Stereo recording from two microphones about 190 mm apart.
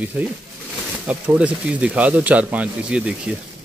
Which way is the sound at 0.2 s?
5° right (ahead or behind).